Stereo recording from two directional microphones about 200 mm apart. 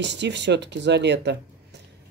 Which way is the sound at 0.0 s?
60° right (ahead or behind).